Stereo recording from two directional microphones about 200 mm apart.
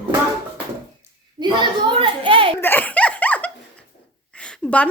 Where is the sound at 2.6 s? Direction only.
10° left (ahead or behind).